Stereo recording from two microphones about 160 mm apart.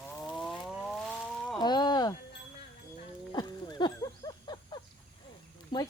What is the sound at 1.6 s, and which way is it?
Speech, 25° left (ahead or behind).